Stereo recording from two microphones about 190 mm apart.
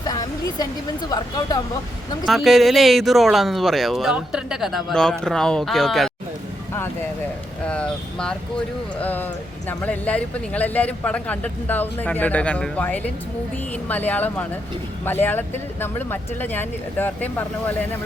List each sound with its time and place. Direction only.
0.0 s a sound: 20° left (ahead or behind)
1.1 s speech: 20° left (ahead or behind)
2.2 s speech: centre (ahead or behind)
7.6 s speech: 5° left (ahead or behind)